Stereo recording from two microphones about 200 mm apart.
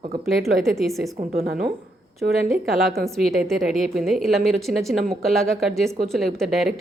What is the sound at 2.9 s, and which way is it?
A woman's voice, centre (ahead or behind).